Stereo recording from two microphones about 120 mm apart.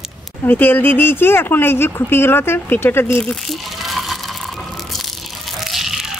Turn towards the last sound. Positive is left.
turn(degrees=-5)  # may be behind; listen again after turning